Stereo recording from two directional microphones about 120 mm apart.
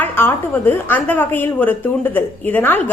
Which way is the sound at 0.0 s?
15° left (ahead or behind).